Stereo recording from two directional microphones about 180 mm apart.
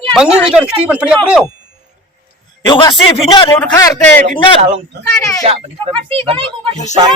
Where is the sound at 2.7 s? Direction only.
25° left (ahead or behind).